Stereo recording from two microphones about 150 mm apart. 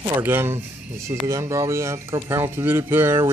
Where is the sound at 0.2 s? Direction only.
15° right (ahead or behind).